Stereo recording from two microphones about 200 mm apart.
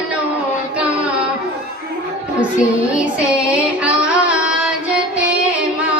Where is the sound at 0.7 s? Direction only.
5° right (ahead or behind).